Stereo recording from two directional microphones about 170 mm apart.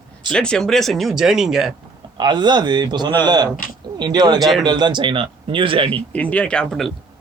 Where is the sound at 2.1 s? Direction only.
25° right (ahead or behind).